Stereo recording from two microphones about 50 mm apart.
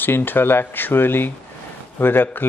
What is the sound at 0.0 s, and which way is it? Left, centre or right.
Speech, left.